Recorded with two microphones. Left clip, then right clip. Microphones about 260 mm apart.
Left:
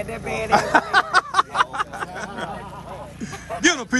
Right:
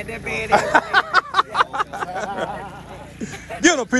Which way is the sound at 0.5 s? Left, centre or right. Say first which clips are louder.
Right 1 dB; centre.